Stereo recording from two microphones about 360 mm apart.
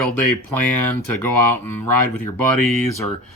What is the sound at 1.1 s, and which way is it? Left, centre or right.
Speech, left.